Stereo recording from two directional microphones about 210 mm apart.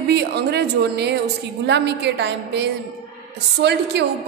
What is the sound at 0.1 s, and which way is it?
A woman's voice, 50° right (ahead or behind).